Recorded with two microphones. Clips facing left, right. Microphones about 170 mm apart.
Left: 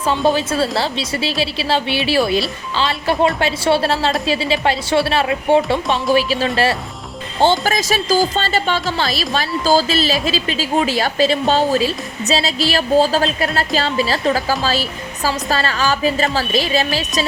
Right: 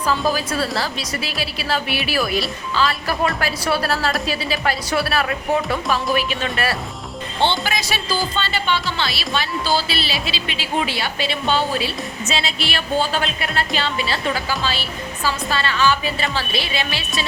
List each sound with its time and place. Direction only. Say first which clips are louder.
0.0 s a woman's voice: left 4 dB; 25° left (ahead or behind)